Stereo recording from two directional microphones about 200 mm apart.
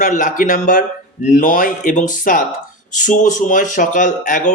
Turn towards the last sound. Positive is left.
turn(degrees=40)  # may be behind; listen again after turning